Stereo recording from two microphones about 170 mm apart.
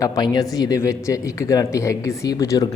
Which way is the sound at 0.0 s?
20° left (ahead or behind).